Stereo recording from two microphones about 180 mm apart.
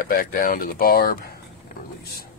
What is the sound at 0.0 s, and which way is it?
Speech, 50° left (ahead or behind).